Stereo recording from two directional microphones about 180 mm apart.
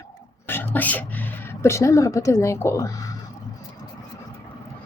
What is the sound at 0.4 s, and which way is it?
A woman's voice, 10° left (ahead or behind).